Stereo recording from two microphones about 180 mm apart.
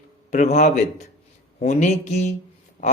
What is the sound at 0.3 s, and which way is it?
Speech, 40° left (ahead or behind).